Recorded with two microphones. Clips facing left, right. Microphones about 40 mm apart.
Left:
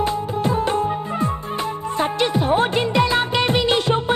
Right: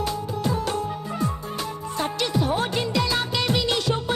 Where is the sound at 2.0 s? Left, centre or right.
Left.